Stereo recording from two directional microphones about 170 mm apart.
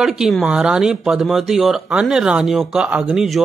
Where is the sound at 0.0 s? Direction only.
5° right (ahead or behind).